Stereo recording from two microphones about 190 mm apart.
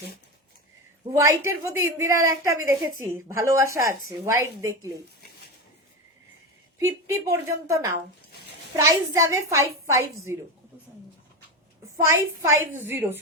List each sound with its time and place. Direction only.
1.5 s a woman's voice: 15° right (ahead or behind)
6.7 s a woman's voice: 15° right (ahead or behind)
12.0 s a woman's voice: 15° right (ahead or behind)